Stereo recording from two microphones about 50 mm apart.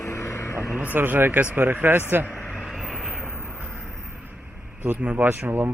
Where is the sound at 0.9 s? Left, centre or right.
Right.